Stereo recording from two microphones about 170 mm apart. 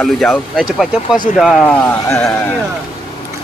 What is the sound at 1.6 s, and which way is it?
Speech, 10° left (ahead or behind).